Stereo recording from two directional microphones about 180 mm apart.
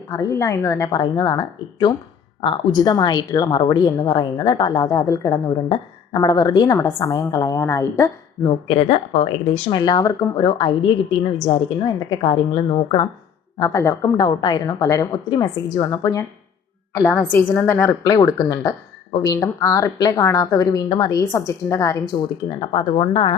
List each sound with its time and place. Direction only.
0.1 s a woman's voice: 15° left (ahead or behind)
8.4 s speech: 30° left (ahead or behind)
9.7 s a woman's voice: 25° left (ahead or behind)
13.6 s a woman's voice: 15° left (ahead or behind)
16.9 s a woman's voice: 10° left (ahead or behind); by 23.3 s 30° left (ahead or behind)